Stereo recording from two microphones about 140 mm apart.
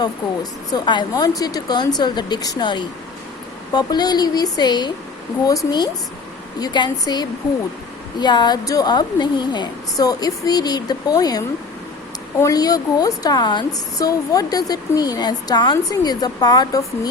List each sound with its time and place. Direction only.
0.7 s speech: 30° left (ahead or behind)